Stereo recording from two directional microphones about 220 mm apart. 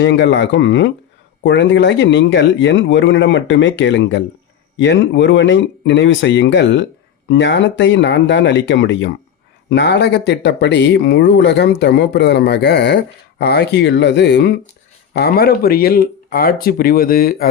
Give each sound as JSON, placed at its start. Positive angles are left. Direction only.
{"t": 0.0, "sound": "speech", "side_deg": 55}